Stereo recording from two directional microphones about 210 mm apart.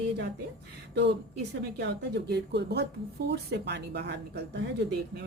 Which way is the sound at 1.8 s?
55° right (ahead or behind).